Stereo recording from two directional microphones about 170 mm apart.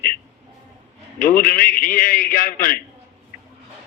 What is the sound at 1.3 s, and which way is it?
A man's voice, 55° left (ahead or behind).